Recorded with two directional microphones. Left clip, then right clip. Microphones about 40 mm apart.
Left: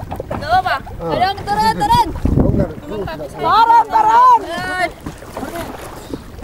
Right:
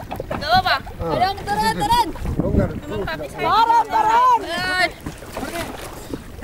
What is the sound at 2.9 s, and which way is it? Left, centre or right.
Speech, left.